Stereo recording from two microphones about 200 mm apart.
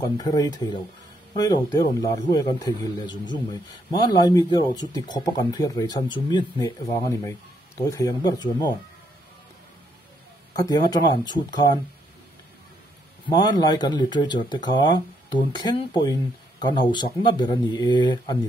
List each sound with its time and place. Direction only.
0.0 s speech: 20° left (ahead or behind)
10.5 s speech: 20° left (ahead or behind)
13.3 s speech: 20° left (ahead or behind)